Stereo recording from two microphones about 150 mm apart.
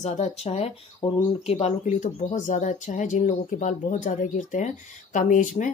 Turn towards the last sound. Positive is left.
turn(degrees=60)  # may be behind; listen again after turning